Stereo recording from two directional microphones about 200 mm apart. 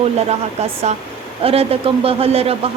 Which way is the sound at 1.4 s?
30° right (ahead or behind).